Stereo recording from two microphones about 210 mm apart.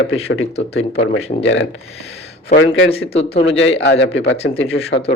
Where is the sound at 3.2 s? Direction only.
30° left (ahead or behind).